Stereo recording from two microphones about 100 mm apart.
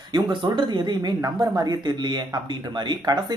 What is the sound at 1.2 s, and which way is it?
Speech, 35° right (ahead or behind).